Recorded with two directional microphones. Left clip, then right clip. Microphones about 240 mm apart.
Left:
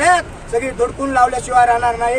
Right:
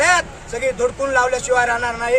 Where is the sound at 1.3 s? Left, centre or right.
Right.